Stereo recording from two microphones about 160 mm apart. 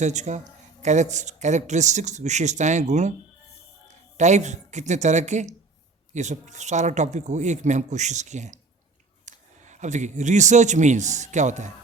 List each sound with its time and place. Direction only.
0.0 s a man's voice: 45° right (ahead or behind)